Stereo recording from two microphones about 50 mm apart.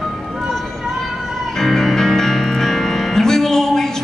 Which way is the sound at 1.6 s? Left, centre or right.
Centre.